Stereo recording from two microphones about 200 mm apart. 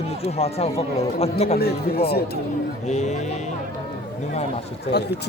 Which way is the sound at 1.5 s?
50° left (ahead or behind).